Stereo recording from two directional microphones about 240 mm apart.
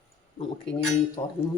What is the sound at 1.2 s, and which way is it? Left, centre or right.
Dishes, centre.